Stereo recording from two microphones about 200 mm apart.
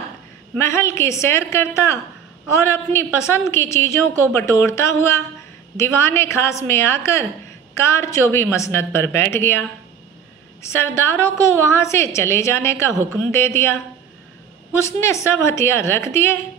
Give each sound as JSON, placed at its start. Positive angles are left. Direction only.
{"t": 0.6, "sound": "a woman's voice", "side_deg": 15}